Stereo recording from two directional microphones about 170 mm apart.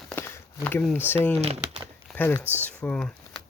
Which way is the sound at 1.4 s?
35° right (ahead or behind).